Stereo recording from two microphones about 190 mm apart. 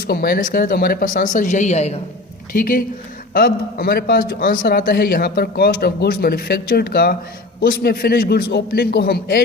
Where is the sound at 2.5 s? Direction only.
50° left (ahead or behind).